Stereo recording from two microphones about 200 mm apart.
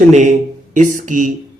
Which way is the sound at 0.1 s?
40° right (ahead or behind).